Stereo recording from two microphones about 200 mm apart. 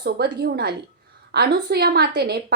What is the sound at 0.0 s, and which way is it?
A woman's voice, 55° right (ahead or behind).